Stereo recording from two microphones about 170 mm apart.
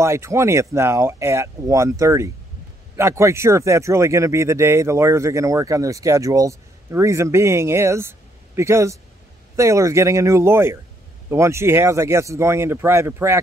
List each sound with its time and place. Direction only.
0.0 s speech: 15° right (ahead or behind)